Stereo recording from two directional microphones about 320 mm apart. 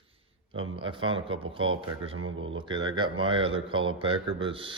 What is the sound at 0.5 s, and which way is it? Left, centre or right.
Speech, right.